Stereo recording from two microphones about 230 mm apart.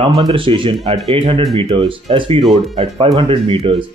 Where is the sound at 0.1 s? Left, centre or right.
Right.